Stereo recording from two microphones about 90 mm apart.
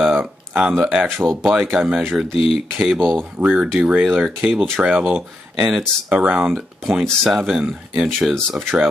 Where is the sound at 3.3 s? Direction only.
15° right (ahead or behind).